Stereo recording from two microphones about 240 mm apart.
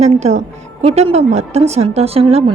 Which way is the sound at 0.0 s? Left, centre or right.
Right.